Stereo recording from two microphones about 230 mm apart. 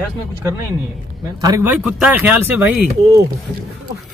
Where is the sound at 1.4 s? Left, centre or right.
Centre.